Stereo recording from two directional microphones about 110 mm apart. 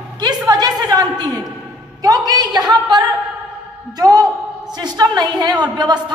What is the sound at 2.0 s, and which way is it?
A woman's voice, 35° right (ahead or behind).